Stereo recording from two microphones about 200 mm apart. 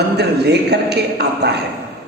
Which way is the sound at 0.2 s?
55° right (ahead or behind).